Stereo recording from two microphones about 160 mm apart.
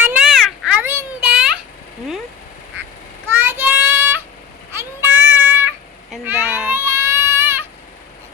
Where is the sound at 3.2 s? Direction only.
15° right (ahead or behind).